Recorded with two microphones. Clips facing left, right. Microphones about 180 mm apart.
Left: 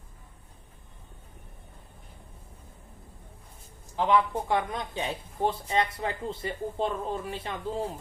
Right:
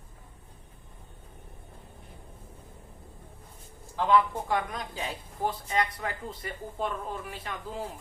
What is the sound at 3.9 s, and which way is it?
Speech, 20° left (ahead or behind).